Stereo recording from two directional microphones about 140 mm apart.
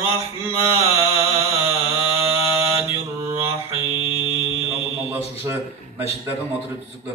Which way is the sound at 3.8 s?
40° left (ahead or behind).